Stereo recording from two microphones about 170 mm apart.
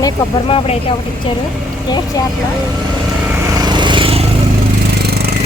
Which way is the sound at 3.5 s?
25° right (ahead or behind).